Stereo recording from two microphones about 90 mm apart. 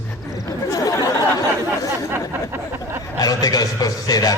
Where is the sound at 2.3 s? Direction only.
25° right (ahead or behind).